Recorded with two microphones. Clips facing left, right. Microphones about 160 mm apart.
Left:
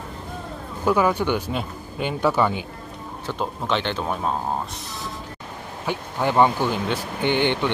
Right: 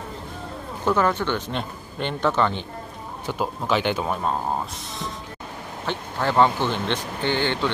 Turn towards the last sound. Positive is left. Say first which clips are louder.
# left 2 dB
turn(degrees=15)  # may be behind; listen again after turning